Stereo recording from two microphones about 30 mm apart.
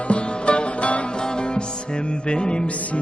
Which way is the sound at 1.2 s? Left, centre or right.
Left.